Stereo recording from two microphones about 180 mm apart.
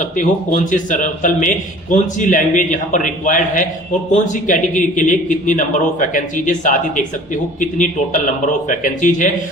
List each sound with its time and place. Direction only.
0.2 s a man's voice: 45° left (ahead or behind)